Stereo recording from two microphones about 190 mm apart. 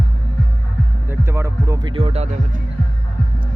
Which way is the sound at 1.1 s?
15° right (ahead or behind).